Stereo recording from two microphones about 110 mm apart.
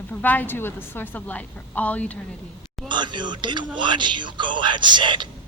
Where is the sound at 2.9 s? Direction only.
45° right (ahead or behind).